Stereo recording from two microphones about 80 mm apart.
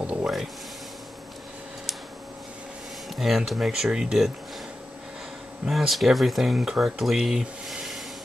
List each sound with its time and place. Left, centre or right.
0.0 s a sound: centre
3.1 s speech: centre
5.7 s speech: centre